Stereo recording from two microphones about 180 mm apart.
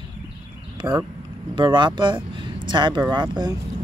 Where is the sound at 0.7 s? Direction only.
25° right (ahead or behind).